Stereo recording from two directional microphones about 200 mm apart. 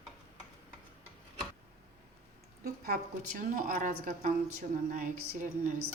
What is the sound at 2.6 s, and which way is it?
A woman's voice, 50° right (ahead or behind).